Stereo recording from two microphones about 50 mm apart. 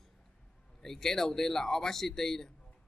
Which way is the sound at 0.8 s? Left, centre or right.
Centre.